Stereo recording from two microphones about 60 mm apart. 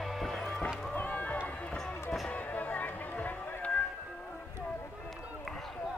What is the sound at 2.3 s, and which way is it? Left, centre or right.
Music, left.